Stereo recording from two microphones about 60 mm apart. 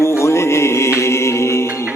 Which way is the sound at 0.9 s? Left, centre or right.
Left.